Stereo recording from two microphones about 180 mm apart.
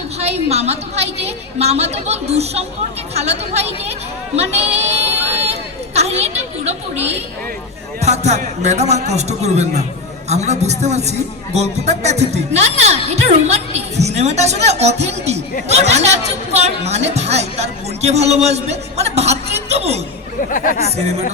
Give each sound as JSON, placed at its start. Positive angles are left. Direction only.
{"t": 0.2, "sound": "a woman's voice", "side_deg": -35}
{"t": 5.4, "sound": "chatter", "side_deg": -35}
{"t": 8.0, "sound": "a woman's voice", "side_deg": -40}
{"t": 20.5, "sound": "speech", "side_deg": 50}